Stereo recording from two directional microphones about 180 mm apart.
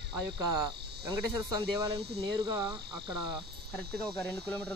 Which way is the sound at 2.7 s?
25° right (ahead or behind).